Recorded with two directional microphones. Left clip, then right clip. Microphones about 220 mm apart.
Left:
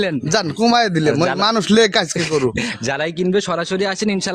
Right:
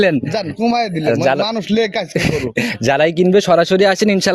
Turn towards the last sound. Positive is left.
turn(degrees=-25)  # may be behind; listen again after turning